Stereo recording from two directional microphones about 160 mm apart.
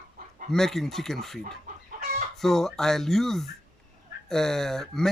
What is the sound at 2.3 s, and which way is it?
Speech, centre (ahead or behind).